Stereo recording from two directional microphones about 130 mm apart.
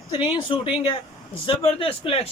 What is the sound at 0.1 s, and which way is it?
A man's voice, 40° left (ahead or behind).